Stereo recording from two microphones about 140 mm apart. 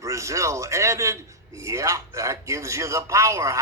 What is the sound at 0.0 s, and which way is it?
A man's voice, 20° right (ahead or behind).